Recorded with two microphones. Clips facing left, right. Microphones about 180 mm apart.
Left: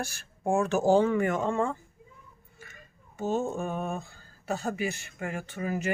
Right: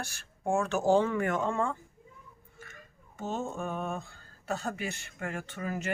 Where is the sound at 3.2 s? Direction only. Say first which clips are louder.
Left 5 dB; 5° left (ahead or behind).